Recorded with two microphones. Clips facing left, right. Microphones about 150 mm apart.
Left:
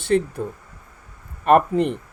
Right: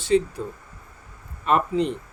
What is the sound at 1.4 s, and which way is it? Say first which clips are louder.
Speech: left 5 dB; 55° left (ahead or behind).